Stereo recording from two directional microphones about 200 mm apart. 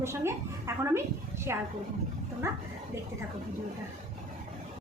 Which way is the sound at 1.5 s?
15° right (ahead or behind).